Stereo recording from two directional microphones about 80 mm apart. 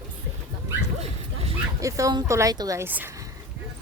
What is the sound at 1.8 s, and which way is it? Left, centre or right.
Speech, right.